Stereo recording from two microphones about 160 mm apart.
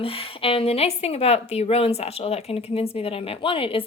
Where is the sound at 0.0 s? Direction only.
35° left (ahead or behind).